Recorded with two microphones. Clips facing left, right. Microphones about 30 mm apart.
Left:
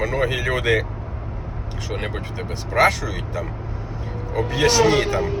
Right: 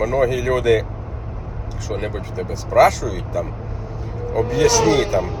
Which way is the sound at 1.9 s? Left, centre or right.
Left.